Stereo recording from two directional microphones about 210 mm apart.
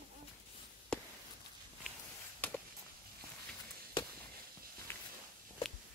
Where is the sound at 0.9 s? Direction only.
5° left (ahead or behind).